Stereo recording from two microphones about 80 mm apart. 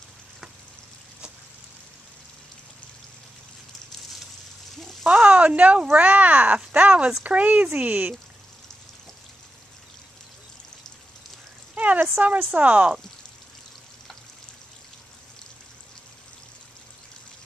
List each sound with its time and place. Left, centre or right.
5.0 s speech: centre
11.7 s speech: right